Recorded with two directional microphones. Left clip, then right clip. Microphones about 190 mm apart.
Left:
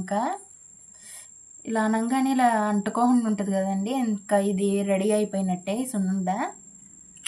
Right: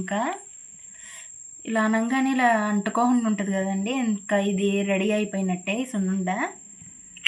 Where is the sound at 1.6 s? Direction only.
10° left (ahead or behind).